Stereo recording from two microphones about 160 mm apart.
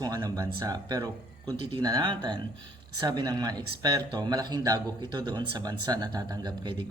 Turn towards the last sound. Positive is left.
turn(degrees=-25)  # may be behind; listen again after turning